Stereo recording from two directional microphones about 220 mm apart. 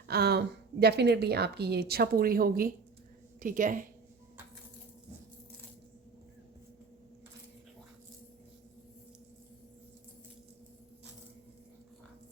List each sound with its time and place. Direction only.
0.1 s a woman's voice: 50° right (ahead or behind)